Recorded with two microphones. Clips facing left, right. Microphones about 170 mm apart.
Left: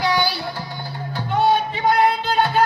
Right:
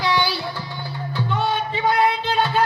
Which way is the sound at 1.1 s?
40° left (ahead or behind).